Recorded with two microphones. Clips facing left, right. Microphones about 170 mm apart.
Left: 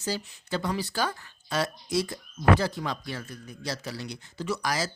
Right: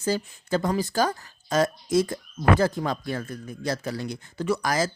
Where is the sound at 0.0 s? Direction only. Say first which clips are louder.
Right 6 dB; 50° right (ahead or behind).